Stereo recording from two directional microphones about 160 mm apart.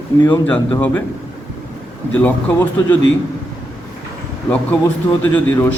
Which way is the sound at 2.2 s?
10° left (ahead or behind).